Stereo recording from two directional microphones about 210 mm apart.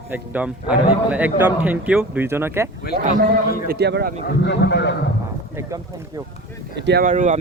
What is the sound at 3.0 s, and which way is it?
Speech, 35° right (ahead or behind).